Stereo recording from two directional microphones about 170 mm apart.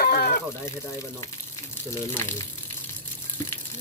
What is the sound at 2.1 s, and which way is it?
Speech, 15° left (ahead or behind).